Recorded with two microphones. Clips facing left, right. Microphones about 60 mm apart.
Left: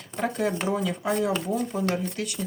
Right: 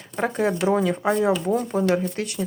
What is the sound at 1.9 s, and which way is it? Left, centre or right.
Speech, right.